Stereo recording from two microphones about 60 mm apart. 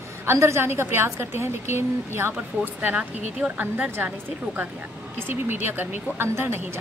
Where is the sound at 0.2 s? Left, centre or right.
Right.